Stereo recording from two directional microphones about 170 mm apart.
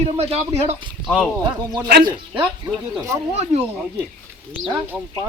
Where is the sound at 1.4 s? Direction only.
20° right (ahead or behind).